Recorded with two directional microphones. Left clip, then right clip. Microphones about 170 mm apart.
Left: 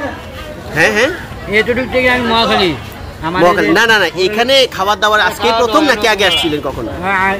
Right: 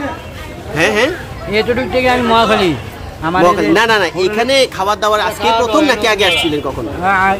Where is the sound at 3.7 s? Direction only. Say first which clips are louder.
Left 1 dB; 10° right (ahead or behind).